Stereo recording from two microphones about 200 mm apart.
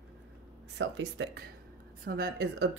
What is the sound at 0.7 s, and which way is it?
Speech, 65° right (ahead or behind).